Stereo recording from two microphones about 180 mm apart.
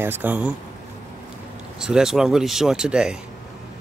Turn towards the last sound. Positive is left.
turn(degrees=-5)  # may be behind; listen again after turning